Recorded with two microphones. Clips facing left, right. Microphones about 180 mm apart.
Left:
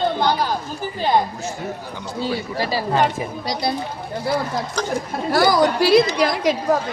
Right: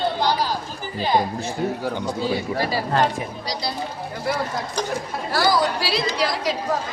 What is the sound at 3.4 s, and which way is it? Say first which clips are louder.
Speech: left 8 dB; 55° left (ahead or behind).